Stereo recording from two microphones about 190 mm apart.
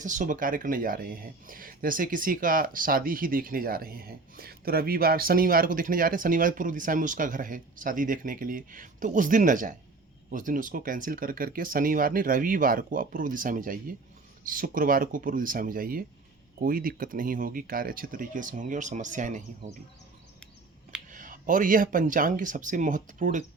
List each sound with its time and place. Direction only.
0.0 s speech: 40° right (ahead or behind)
21.1 s speech: 45° right (ahead or behind)